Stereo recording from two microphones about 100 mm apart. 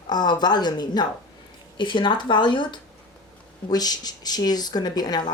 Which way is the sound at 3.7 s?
40° left (ahead or behind).